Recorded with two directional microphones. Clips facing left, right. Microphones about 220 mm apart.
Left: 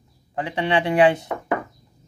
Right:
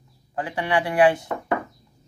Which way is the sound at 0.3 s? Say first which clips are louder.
Left 2 dB; 20° left (ahead or behind).